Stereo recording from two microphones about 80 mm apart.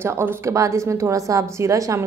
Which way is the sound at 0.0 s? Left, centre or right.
Right.